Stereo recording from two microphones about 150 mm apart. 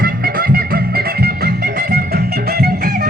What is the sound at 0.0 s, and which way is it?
Music, 90° right.